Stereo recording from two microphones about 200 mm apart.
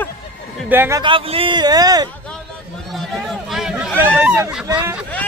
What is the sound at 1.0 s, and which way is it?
A man's voice, 25° right (ahead or behind).